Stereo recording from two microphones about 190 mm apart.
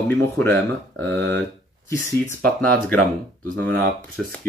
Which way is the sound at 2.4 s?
5° left (ahead or behind).